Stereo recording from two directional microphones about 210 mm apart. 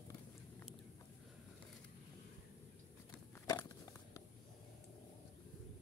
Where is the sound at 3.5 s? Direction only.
15° left (ahead or behind).